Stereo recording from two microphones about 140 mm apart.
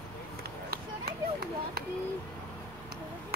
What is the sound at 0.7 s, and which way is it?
Run, 90° right.